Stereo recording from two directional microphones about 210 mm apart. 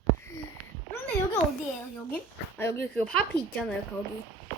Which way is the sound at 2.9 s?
5° left (ahead or behind).